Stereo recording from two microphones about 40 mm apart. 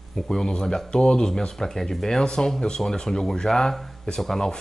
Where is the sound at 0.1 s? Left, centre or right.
Centre.